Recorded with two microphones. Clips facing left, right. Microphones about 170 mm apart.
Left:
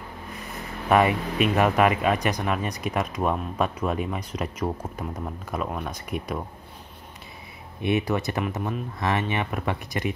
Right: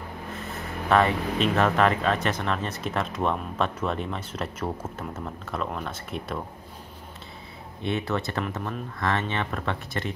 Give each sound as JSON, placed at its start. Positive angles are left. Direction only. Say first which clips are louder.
{"t": 0.8, "sound": "speech", "louder": "left 1 dB", "side_deg": 15}
{"t": 7.8, "sound": "speech", "louder": "left 3 dB", "side_deg": 15}